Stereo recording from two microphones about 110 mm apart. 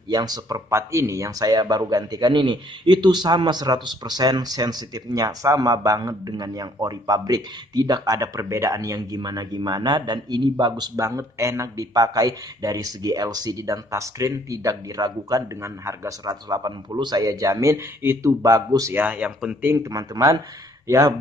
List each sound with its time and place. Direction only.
0.1 s speech: 35° right (ahead or behind)
18.9 s speech: 15° right (ahead or behind)
19.7 s speech: 30° right (ahead or behind)